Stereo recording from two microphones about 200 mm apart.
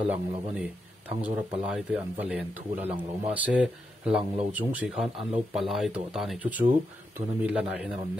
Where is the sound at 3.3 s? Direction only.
5° right (ahead or behind).